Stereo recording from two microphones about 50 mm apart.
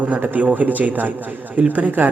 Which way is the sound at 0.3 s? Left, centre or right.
Right.